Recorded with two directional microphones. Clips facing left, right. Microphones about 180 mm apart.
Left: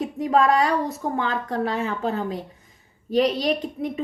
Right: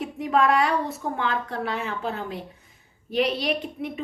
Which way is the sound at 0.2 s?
40° left (ahead or behind).